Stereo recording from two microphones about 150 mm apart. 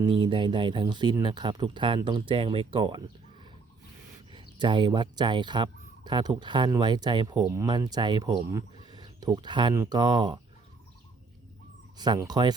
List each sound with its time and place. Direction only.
0.0 s speech: 35° right (ahead or behind)
4.3 s speech: 30° right (ahead or behind)
11.9 s speech: 30° right (ahead or behind)